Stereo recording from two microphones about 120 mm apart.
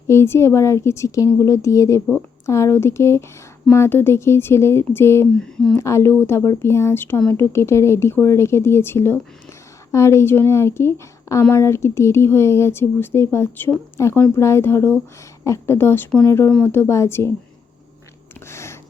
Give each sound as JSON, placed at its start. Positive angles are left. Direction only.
{"t": 0.1, "sound": "speech", "side_deg": 20}
{"t": 5.3, "sound": "speech", "side_deg": 5}
{"t": 5.8, "sound": "speech", "side_deg": 25}
{"t": 16.7, "sound": "speech", "side_deg": 20}
{"t": 18.3, "sound": "a sound", "side_deg": 20}